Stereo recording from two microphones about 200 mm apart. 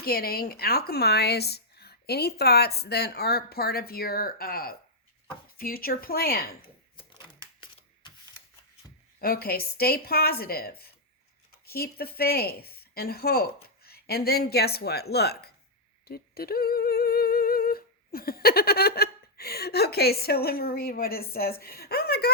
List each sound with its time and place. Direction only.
0.0 s speech: 50° left (ahead or behind)
7.6 s sanding: 25° left (ahead or behind)
9.1 s a woman's voice: 50° left (ahead or behind)
16.0 s humming: 50° left (ahead or behind)
21.6 s a sound: 50° left (ahead or behind)